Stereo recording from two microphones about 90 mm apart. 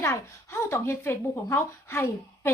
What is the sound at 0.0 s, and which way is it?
A woman's voice, 30° left (ahead or behind).